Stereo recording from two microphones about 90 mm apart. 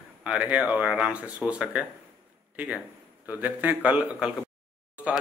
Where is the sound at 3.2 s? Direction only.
20° right (ahead or behind).